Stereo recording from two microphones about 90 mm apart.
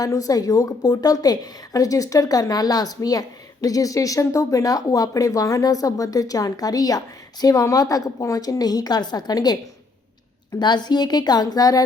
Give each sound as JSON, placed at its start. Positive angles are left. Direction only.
{"t": 0.0, "sound": "a woman's voice", "side_deg": 40}
{"t": 10.6, "sound": "a woman's voice", "side_deg": 55}